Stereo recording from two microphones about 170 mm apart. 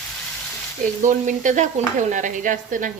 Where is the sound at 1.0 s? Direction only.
45° right (ahead or behind).